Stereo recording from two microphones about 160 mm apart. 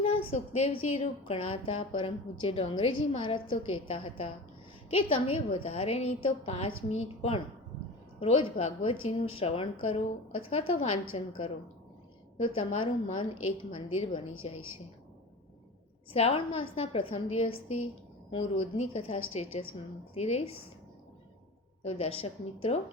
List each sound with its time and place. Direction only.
0.0 s a woman's voice: 40° left (ahead or behind)
16.1 s a woman's voice: 40° left (ahead or behind)
21.8 s a woman's voice: 40° left (ahead or behind)